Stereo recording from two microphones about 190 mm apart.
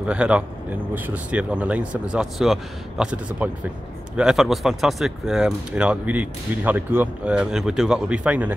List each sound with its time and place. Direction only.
0.0 s speech: 5° right (ahead or behind)